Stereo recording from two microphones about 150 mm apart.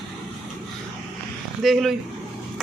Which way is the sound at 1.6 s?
Centre (ahead or behind).